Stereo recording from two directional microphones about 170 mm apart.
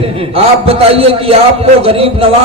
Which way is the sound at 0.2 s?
35° right (ahead or behind).